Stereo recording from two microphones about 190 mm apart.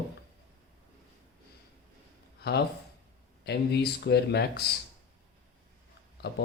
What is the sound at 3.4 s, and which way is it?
Speech, 60° left (ahead or behind).